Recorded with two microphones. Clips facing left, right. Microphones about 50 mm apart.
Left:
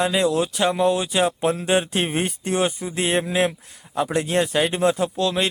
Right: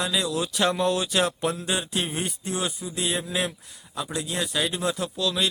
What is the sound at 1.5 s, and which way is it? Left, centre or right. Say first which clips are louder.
A man's voice: left 7 dB; left.